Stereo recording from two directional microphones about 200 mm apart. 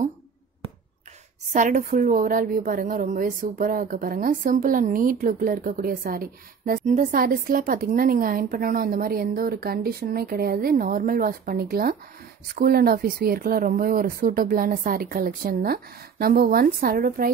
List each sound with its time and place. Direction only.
1.5 s a woman's voice: 40° right (ahead or behind)